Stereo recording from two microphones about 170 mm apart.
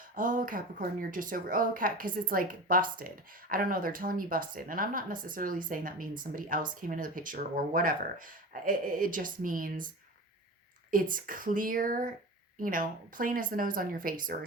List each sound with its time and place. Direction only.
0.2 s speech: 50° right (ahead or behind)
10.9 s speech: 55° right (ahead or behind)